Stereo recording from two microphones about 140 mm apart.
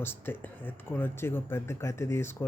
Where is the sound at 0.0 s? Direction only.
15° left (ahead or behind).